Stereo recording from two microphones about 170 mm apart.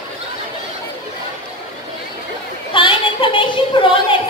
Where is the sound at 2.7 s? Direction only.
30° left (ahead or behind).